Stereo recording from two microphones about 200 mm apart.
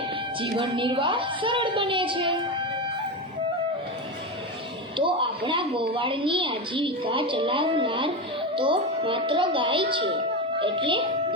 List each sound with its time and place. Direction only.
0.3 s a woman's voice: 25° right (ahead or behind)
4.9 s a woman's voice: 25° right (ahead or behind)